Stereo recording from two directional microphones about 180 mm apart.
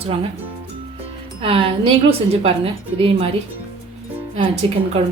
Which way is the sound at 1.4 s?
30° right (ahead or behind).